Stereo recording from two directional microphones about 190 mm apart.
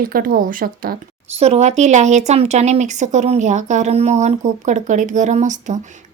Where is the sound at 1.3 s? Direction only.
35° right (ahead or behind).